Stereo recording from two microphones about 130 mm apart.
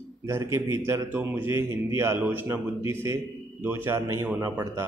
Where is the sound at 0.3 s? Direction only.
20° right (ahead or behind).